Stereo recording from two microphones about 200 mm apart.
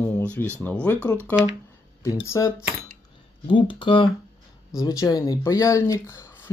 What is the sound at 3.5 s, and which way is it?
Speech, 25° left (ahead or behind).